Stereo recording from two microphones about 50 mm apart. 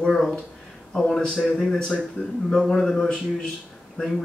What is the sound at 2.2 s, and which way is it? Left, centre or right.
Speech, left.